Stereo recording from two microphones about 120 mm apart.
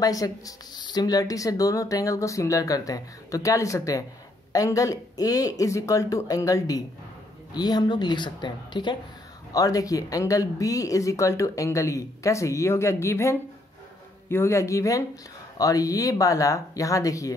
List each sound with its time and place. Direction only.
0.0 s speech: 30° left (ahead or behind)